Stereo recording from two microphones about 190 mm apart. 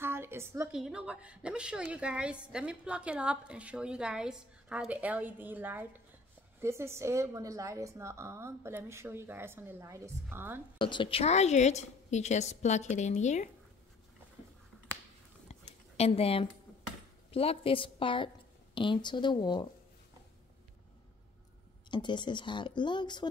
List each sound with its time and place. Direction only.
0.0 s a sound: 10° right (ahead or behind)
0.7 s a woman's voice: 5° right (ahead or behind)
10.8 s a woman's voice: 25° left (ahead or behind)
15.5 s a sound: 30° left (ahead or behind)
16.0 s a woman's voice: 30° left (ahead or behind)
21.9 s speech: 25° left (ahead or behind)